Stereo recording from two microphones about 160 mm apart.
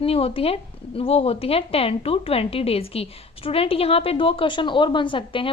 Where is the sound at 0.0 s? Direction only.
40° left (ahead or behind).